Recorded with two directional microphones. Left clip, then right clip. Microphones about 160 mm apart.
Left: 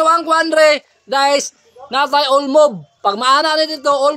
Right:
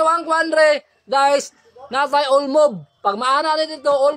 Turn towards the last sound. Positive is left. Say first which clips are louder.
# left 2 dB
turn(degrees=30)  # may be behind; listen again after turning